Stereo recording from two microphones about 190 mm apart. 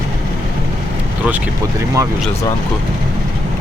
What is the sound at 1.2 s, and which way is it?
Speech, 5° right (ahead or behind).